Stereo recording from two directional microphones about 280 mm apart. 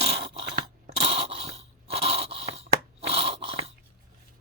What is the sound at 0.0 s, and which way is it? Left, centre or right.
Scrape, centre.